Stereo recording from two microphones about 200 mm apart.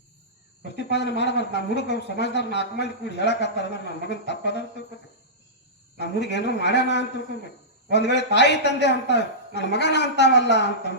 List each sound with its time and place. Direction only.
0.8 s speech: 60° left (ahead or behind)
6.0 s speech: 60° left (ahead or behind)